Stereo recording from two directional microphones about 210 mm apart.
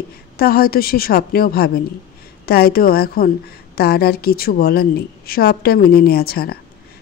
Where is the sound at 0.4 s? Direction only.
45° left (ahead or behind).